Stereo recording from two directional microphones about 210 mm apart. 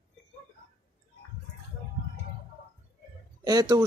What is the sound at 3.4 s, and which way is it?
Speech, 20° right (ahead or behind).